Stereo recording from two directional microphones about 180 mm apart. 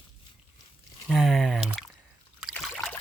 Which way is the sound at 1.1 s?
Centre (ahead or behind).